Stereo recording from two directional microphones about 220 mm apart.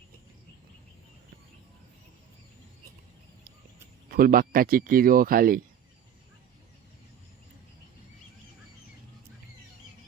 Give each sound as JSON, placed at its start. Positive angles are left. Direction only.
{"t": 4.1, "sound": "speech", "side_deg": -40}